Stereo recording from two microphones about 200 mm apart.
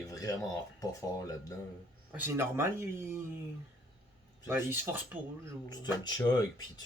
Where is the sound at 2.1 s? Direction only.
10° right (ahead or behind).